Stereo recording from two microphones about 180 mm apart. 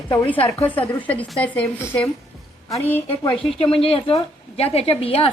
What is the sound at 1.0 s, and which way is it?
Speech, 10° left (ahead or behind).